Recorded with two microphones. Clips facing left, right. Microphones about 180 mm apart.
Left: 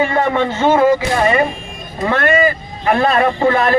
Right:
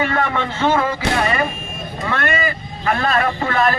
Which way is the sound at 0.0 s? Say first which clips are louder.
Left 5 dB; 25° left (ahead or behind).